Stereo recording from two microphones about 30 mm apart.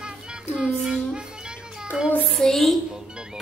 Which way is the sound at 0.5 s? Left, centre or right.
Right.